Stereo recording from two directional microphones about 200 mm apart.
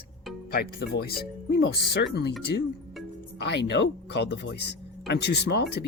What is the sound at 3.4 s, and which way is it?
Speech, 60° left (ahead or behind).